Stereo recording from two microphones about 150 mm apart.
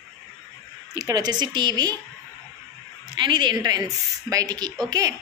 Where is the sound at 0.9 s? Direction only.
25° right (ahead or behind).